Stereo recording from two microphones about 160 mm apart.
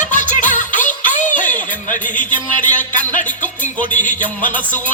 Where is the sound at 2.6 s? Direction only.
50° left (ahead or behind).